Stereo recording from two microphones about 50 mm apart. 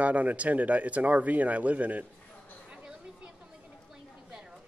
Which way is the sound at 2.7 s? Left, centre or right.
Centre.